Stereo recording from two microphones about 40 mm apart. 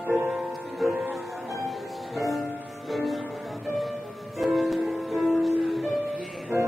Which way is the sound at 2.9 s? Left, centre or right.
Centre.